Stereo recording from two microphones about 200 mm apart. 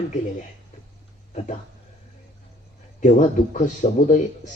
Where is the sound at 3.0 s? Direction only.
40° left (ahead or behind).